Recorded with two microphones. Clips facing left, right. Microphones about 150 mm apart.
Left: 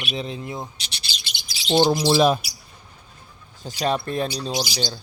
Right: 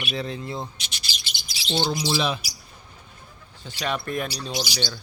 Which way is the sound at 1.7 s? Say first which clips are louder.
Left 7 dB; 45° left (ahead or behind).